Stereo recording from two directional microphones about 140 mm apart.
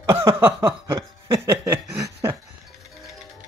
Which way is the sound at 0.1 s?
15° right (ahead or behind).